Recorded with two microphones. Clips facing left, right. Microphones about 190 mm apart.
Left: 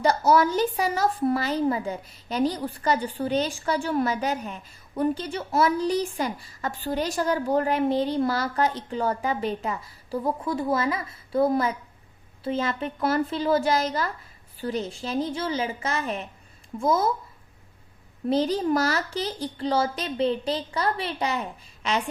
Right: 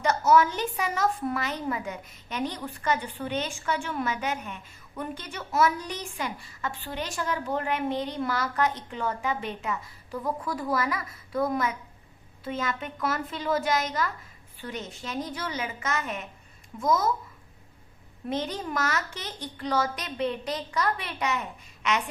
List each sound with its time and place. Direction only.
0.0 s speech: 35° left (ahead or behind)
18.3 s speech: 35° left (ahead or behind)